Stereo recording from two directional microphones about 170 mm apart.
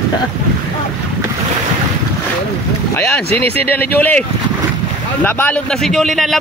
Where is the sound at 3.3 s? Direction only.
35° right (ahead or behind).